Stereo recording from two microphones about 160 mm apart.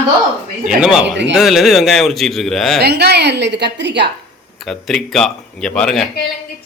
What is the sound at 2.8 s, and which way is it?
A woman's voice, 90° right.